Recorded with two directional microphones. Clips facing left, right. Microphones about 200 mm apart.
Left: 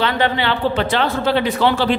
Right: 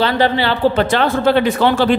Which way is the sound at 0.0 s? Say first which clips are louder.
Right 3 dB; 35° right (ahead or behind).